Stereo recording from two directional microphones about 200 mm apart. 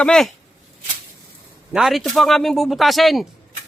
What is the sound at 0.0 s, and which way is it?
Speech, 5° left (ahead or behind).